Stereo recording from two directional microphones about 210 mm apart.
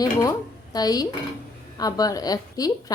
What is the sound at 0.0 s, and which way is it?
A woman's voice, 15° left (ahead or behind).